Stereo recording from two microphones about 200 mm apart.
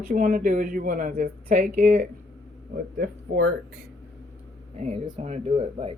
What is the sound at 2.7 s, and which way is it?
Speech, 50° right (ahead or behind).